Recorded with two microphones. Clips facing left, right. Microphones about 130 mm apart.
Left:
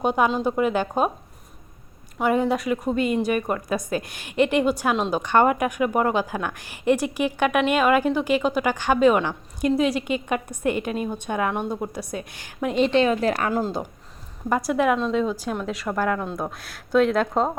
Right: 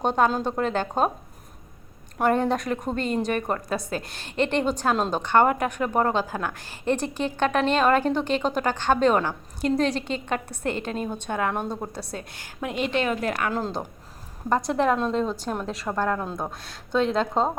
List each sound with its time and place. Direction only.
0.0 s a woman's voice: 5° left (ahead or behind)
2.2 s a woman's voice: 5° left (ahead or behind); by 13.5 s 35° left (ahead or behind)
13.5 s a woman's voice: 10° left (ahead or behind)